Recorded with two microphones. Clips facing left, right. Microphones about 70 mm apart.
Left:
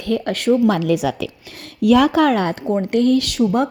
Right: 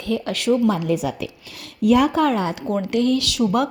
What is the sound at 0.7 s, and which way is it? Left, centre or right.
A woman's voice, left.